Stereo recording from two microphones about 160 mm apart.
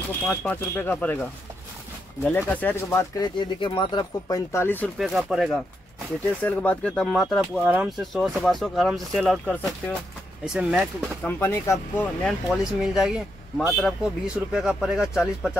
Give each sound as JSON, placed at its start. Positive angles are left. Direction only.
{"t": 0.3, "sound": "speech", "side_deg": 10}
{"t": 2.2, "sound": "speech", "side_deg": 10}
{"t": 3.3, "sound": "speech", "side_deg": 30}
{"t": 4.9, "sound": "speech", "side_deg": 0}
{"t": 11.2, "sound": "speech", "side_deg": 15}
{"t": 12.4, "sound": "speech", "side_deg": -5}